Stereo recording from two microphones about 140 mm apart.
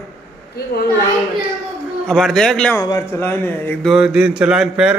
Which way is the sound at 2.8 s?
25° left (ahead or behind).